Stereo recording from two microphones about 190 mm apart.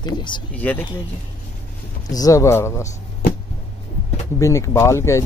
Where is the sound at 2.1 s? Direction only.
15° left (ahead or behind).